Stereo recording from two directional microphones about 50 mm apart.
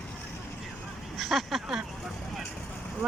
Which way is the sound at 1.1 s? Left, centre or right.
Centre.